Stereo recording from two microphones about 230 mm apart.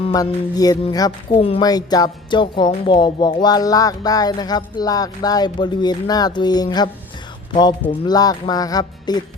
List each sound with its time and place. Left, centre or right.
0.0 s speech: left